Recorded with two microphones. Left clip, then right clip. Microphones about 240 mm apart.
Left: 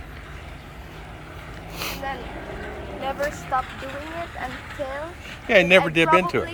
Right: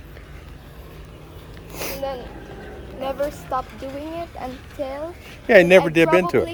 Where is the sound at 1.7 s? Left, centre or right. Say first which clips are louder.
Right 1 dB; right.